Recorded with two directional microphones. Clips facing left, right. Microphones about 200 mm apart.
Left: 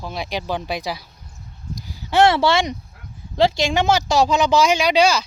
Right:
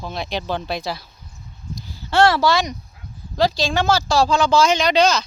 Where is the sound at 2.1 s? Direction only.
20° left (ahead or behind).